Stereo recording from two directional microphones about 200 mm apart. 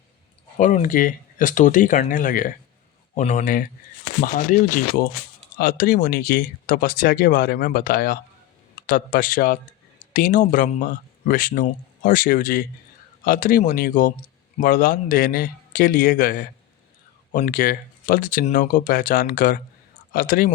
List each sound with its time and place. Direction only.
0.5 s speech: 40° left (ahead or behind)